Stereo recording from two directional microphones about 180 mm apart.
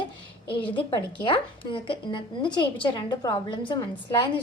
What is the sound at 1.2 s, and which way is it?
A woman's voice, 30° left (ahead or behind).